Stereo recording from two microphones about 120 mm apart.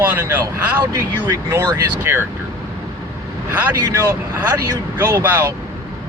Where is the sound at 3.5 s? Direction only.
15° right (ahead or behind).